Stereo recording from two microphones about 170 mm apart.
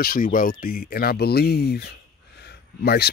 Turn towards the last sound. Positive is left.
turn(degrees=70)  # may be behind; listen again after turning